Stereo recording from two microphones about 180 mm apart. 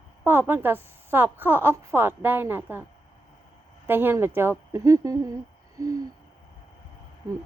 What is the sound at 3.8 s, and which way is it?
A woman's voice, 10° right (ahead or behind).